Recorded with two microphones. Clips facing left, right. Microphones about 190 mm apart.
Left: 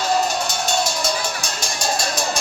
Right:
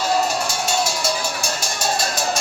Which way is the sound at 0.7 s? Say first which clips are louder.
Even; 5° right (ahead or behind).